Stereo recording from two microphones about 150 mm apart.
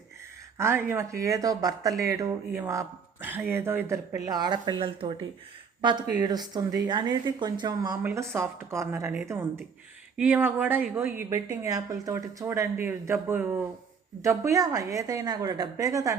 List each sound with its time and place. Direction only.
0.6 s speech: 15° right (ahead or behind)